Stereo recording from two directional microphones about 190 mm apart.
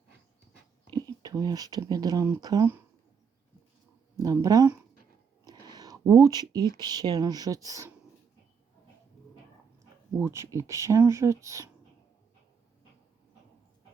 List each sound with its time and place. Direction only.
0.9 s speech: 20° right (ahead or behind)
4.2 s speech: 15° right (ahead or behind)
10.2 s speech: 15° right (ahead or behind)